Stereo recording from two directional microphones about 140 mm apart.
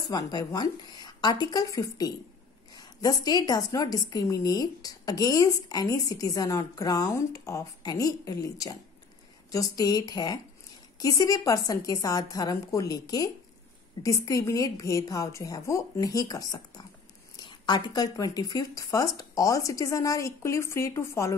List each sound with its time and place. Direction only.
0.1 s a woman's voice: 30° left (ahead or behind)